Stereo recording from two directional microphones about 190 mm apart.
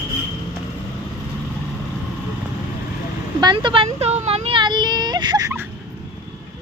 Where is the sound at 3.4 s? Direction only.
25° right (ahead or behind).